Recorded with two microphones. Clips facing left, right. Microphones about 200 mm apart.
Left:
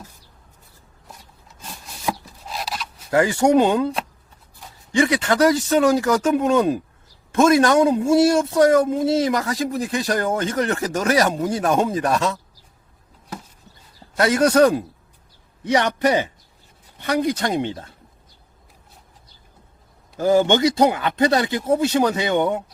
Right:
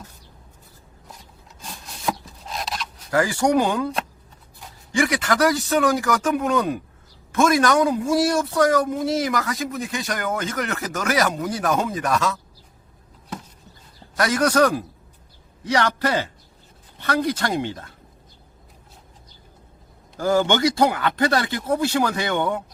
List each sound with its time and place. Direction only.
1.6 s rub: 5° left (ahead or behind)
3.1 s speech: 25° left (ahead or behind)
4.9 s speech: 25° left (ahead or behind)
14.2 s speech: 25° left (ahead or behind)
20.1 s speech: 20° left (ahead or behind)